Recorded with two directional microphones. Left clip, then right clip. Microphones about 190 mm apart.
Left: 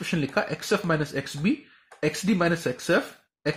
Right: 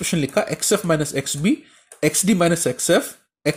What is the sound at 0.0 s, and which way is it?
Speech, 25° right (ahead or behind).